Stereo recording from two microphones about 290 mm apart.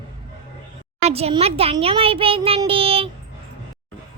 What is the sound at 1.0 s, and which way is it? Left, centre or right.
A child's voice, right.